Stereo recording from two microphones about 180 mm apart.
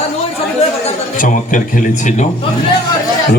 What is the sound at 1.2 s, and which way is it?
A man's voice, 45° left (ahead or behind).